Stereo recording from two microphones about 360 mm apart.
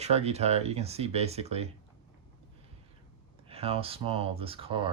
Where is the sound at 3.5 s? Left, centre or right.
Centre.